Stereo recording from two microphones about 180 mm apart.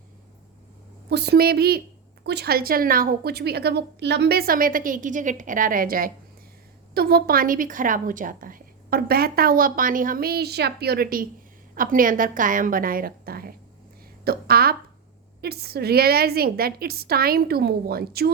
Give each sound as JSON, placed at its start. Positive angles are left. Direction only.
{"t": 1.1, "sound": "a woman's voice", "side_deg": -65}